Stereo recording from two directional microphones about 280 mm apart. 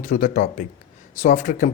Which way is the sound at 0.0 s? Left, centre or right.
Left.